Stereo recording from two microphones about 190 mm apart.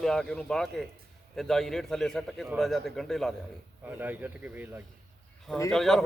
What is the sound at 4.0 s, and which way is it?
Speech, 10° right (ahead or behind).